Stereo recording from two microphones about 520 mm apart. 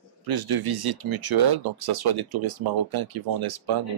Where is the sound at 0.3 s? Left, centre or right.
Right.